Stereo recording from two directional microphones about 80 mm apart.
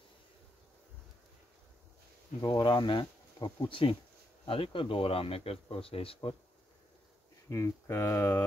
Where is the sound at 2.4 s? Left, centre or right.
Left.